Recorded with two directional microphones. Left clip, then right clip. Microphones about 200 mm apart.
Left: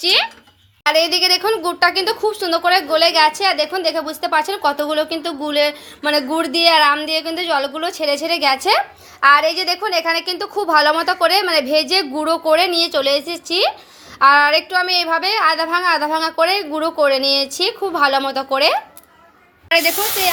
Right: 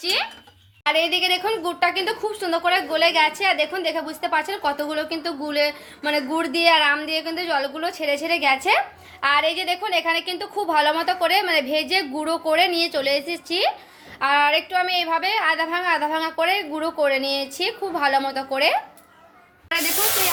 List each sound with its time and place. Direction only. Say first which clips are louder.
0.0 s speech: left 8 dB; 40° left (ahead or behind)